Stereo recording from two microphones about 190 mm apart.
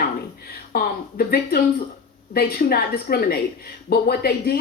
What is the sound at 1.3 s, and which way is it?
A woman's voice, 55° left (ahead or behind).